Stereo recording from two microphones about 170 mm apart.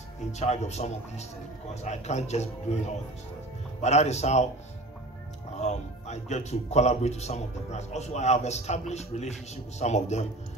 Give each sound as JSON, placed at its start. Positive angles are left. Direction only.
{"t": 0.3, "sound": "speech", "side_deg": 40}
{"t": 3.8, "sound": "speech", "side_deg": 40}
{"t": 5.6, "sound": "speech", "side_deg": 40}